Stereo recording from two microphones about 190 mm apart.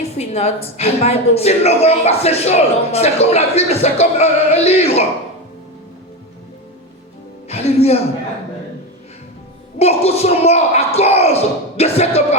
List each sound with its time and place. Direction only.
0.2 s a woman's voice: 35° left (ahead or behind)
7.4 s music: 35° left (ahead or behind)
9.7 s speech: 35° left (ahead or behind)